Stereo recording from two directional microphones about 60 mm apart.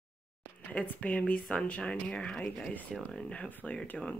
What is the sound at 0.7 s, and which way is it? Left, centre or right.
Speech, left.